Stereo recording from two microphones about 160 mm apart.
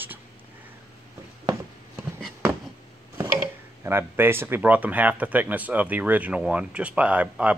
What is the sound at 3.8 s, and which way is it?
Speech, 15° right (ahead or behind).